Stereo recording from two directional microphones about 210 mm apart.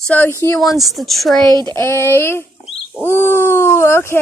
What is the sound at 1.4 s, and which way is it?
Speech, 20° right (ahead or behind).